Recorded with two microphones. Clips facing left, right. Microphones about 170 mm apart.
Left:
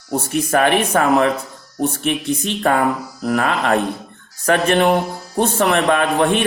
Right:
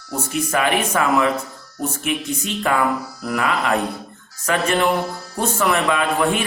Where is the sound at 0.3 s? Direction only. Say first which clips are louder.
Left 4 dB; 60° left (ahead or behind).